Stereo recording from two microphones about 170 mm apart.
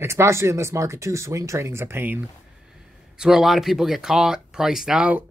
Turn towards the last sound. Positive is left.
turn(degrees=-5)  # may be behind; listen again after turning